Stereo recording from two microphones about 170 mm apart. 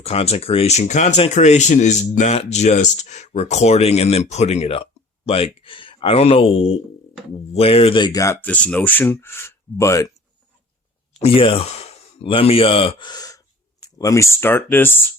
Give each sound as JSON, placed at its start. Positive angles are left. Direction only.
{"t": 0.0, "sound": "speech", "side_deg": 35}
{"t": 11.2, "sound": "speech", "side_deg": 35}